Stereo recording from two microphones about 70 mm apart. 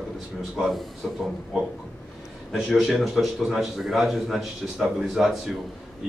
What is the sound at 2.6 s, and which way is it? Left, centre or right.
Speech, centre.